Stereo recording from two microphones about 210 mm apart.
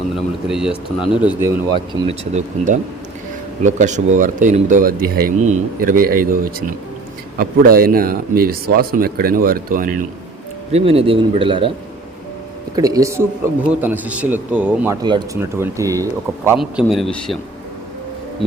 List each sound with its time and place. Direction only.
0.4 s speech: 5° right (ahead or behind)
1.7 s speech: 30° right (ahead or behind)
10.7 s a man's voice: 30° right (ahead or behind)
12.7 s speech: 15° right (ahead or behind); by 17.3 s centre (ahead or behind)